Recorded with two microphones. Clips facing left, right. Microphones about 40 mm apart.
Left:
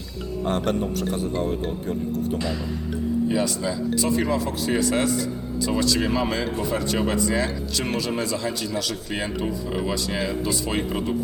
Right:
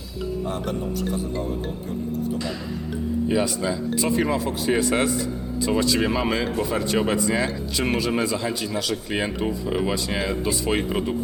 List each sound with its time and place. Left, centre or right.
0.4 s a man's voice: left
3.2 s speech: centre